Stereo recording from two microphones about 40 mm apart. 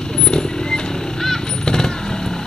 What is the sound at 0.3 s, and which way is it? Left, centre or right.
Vehicle, centre.